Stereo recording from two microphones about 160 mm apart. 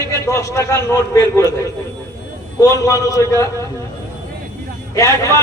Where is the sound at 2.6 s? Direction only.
20° left (ahead or behind).